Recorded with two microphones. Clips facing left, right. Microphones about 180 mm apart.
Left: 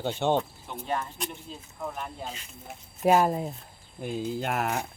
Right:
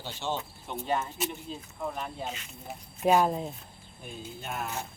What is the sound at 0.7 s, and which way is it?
Speech, centre (ahead or behind).